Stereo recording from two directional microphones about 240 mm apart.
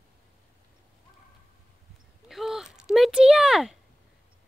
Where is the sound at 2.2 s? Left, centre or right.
Centre.